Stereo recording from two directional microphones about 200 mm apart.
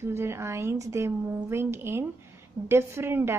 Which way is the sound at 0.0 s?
10° right (ahead or behind).